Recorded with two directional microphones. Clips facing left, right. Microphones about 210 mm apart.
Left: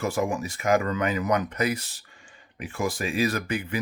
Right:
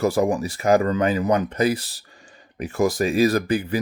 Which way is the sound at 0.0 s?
35° right (ahead or behind).